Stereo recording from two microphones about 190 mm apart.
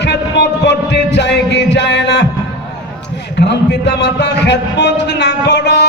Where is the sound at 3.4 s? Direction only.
65° left (ahead or behind).